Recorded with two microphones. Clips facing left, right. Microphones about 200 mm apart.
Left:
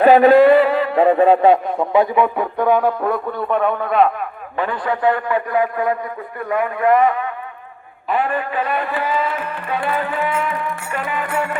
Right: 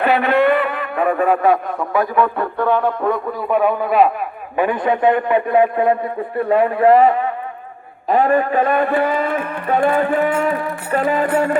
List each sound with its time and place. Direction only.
0.0 s a man's voice: 35° left (ahead or behind)
2.1 s speech: 15° left (ahead or behind)
3.5 s a man's voice: 5° right (ahead or behind); by 11.5 s 35° right (ahead or behind)